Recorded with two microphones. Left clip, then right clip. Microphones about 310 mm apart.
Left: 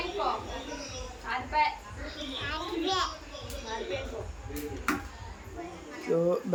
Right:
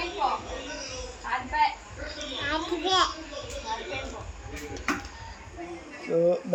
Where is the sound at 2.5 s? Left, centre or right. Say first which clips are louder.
Right 6 dB; centre.